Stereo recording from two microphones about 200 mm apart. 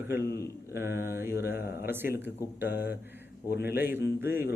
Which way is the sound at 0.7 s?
10° right (ahead or behind).